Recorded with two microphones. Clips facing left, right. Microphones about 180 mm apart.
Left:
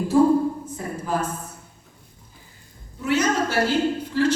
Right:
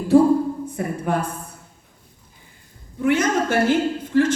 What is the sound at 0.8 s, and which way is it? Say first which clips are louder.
Speech: right 4 dB; 60° right (ahead or behind).